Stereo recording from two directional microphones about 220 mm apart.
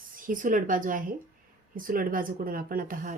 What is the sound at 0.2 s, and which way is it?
Speech, 40° right (ahead or behind).